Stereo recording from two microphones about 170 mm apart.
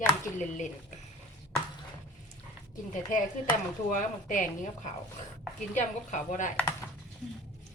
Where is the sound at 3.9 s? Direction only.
45° left (ahead or behind).